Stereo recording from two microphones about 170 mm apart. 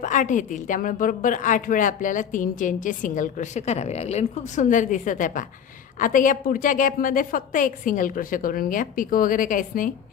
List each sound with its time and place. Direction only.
0.0 s a woman's voice: 45° left (ahead or behind)